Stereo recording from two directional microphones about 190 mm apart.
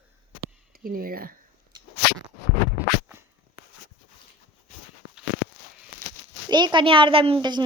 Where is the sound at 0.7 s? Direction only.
50° right (ahead or behind).